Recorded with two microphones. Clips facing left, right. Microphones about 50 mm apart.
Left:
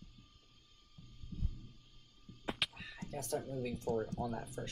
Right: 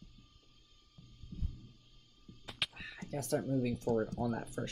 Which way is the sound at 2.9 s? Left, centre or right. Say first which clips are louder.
Right 4 dB; right.